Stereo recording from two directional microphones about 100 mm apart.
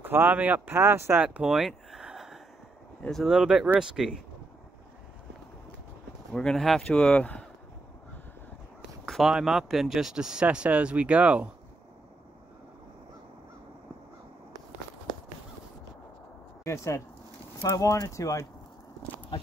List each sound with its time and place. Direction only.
0.0 s speech: 20° right (ahead or behind)
1.2 s a sound: 10° right (ahead or behind)
3.0 s speech: 5° left (ahead or behind)
6.3 s speech: 5° left (ahead or behind)
9.0 s speech: centre (ahead or behind)
16.6 s speech: 30° left (ahead or behind)